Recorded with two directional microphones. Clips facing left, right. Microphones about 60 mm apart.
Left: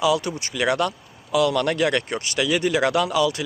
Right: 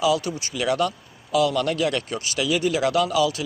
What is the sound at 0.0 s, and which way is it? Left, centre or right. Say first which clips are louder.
Speech: left 1 dB; left.